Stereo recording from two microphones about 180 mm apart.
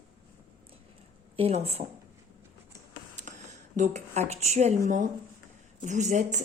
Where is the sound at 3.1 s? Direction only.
45° right (ahead or behind).